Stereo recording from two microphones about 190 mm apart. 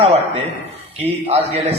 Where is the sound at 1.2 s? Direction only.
30° right (ahead or behind).